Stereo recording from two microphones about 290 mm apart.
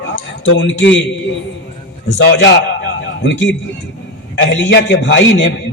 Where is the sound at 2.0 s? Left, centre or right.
Left.